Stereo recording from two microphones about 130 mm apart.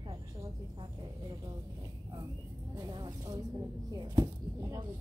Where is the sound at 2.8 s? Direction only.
30° right (ahead or behind).